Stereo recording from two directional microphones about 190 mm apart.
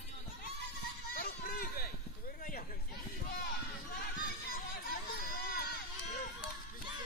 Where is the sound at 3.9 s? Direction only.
50° left (ahead or behind).